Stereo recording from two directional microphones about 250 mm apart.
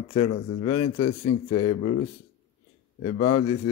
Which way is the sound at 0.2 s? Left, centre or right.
Left.